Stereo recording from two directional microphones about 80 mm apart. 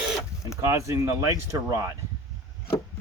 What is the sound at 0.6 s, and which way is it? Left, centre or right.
Speech, right.